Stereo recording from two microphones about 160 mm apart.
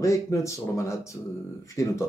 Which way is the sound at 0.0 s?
20° left (ahead or behind).